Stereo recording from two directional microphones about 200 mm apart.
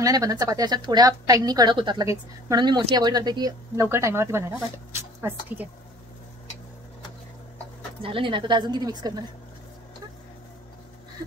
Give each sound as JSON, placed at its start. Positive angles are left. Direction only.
{"t": 0.0, "sound": "a woman's voice", "side_deg": -15}
{"t": 8.0, "sound": "a woman's voice", "side_deg": -25}